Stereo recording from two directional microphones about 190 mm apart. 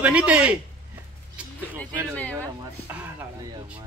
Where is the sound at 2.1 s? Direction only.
5° left (ahead or behind).